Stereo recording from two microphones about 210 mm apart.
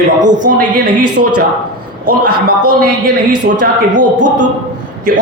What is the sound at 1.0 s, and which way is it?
Speech, 90° right.